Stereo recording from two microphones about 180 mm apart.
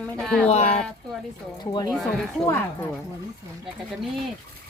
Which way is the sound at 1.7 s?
20° left (ahead or behind).